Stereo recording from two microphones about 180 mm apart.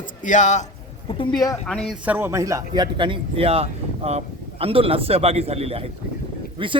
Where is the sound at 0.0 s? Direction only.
45° left (ahead or behind).